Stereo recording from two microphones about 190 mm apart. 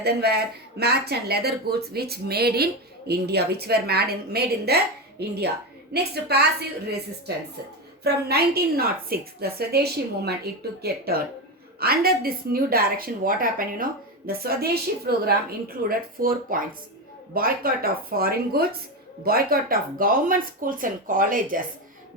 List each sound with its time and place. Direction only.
0.0 s a woman's voice: 55° right (ahead or behind)
5.9 s a woman's voice: 55° right (ahead or behind)
8.0 s a woman's voice: 55° right (ahead or behind)